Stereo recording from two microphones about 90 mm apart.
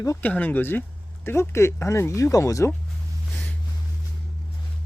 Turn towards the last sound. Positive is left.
turn(degrees=15)  # may be behind; listen again after turning